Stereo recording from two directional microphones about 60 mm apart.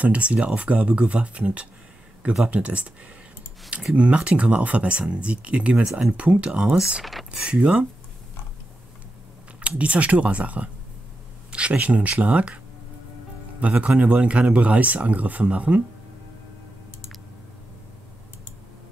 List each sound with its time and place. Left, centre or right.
0.0 s speech: right
3.9 s speech: centre
7.2 s speech: centre
9.6 s speech: right
13.6 s speech: right